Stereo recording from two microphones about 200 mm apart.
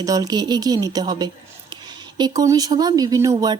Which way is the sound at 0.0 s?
20° right (ahead or behind).